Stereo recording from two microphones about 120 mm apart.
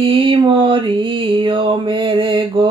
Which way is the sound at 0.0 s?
45° right (ahead or behind).